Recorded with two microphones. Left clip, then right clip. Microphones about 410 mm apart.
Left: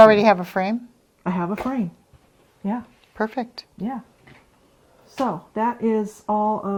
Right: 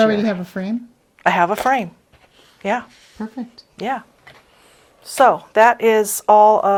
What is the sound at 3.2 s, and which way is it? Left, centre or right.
Speech, left.